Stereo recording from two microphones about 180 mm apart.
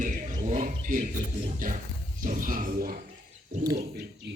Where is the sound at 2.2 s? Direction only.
50° right (ahead or behind).